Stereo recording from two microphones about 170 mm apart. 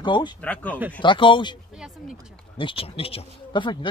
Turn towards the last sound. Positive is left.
turn(degrees=30)  # may be behind; listen again after turning